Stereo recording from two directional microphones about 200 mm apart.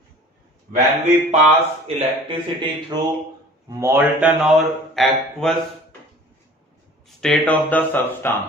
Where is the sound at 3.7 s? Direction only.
15° right (ahead or behind); by 5.5 s centre (ahead or behind).